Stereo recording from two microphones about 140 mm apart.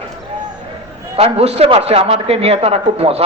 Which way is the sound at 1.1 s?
45° right (ahead or behind).